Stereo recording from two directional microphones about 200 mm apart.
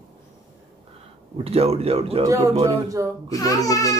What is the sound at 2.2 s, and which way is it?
Speech, 15° right (ahead or behind).